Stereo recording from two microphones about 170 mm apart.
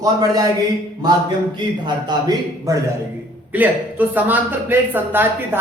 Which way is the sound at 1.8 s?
20° right (ahead or behind).